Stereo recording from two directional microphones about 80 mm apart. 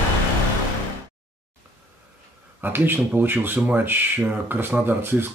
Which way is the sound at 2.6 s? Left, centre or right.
Right.